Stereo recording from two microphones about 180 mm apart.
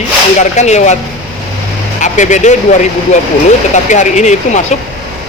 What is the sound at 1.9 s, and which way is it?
Speech, 40° left (ahead or behind).